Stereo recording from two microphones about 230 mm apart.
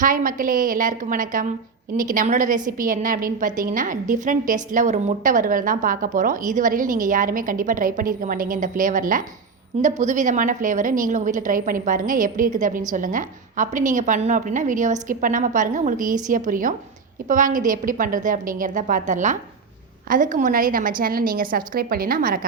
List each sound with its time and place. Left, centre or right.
0.0 s a woman's voice: right